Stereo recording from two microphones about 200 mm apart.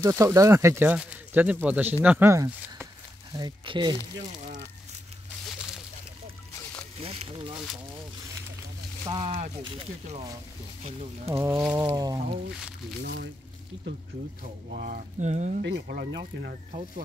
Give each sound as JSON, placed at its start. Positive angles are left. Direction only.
{"t": 0.0, "sound": "speech", "side_deg": -15}
{"t": 7.0, "sound": "speech", "side_deg": -25}
{"t": 9.0, "sound": "speech", "side_deg": -25}
{"t": 11.3, "sound": "speech", "side_deg": -15}
{"t": 13.0, "sound": "speech", "side_deg": -60}
{"t": 14.7, "sound": "speech", "side_deg": -45}
{"t": 15.6, "sound": "speech", "side_deg": -55}